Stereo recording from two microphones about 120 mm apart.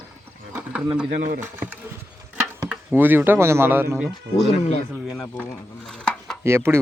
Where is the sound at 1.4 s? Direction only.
15° right (ahead or behind).